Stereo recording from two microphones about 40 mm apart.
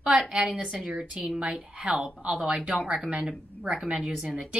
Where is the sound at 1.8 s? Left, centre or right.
Right.